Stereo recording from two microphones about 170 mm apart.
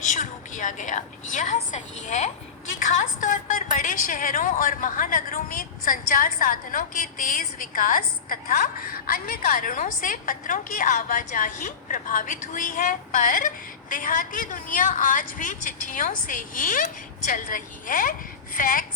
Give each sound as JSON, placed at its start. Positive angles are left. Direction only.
{"t": 0.0, "sound": "a woman's voice", "side_deg": 45}